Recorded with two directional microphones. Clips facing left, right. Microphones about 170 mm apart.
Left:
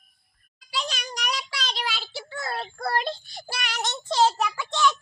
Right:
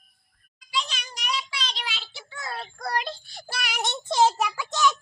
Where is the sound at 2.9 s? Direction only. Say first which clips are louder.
Left 2 dB; 30° left (ahead or behind).